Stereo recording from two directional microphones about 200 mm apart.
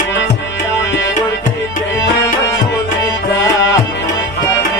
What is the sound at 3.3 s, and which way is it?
Music, 70° left (ahead or behind).